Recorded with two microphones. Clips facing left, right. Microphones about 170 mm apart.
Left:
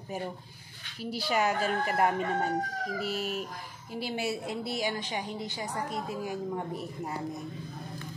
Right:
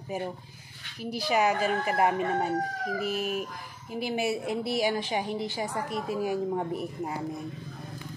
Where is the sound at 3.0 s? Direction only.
50° right (ahead or behind).